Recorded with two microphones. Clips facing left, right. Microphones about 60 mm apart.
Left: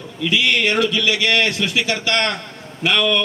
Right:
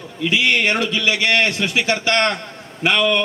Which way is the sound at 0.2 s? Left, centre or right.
Right.